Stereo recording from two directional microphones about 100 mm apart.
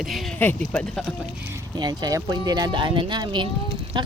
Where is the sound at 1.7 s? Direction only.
45° right (ahead or behind).